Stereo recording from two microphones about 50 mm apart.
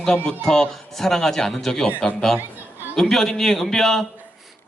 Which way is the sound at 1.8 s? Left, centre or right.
Left.